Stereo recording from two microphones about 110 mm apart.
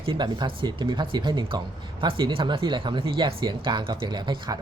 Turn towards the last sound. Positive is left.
turn(degrees=-40)  # may be behind; listen again after turning